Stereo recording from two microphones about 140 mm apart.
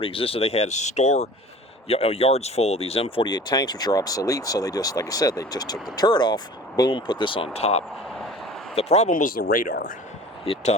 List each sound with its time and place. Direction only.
0.0 s speech: 40° left (ahead or behind)
3.2 s speech: 30° left (ahead or behind); by 9.0 s 50° left (ahead or behind)
9.0 s speech: 75° left (ahead or behind)
10.4 s speech: 45° left (ahead or behind)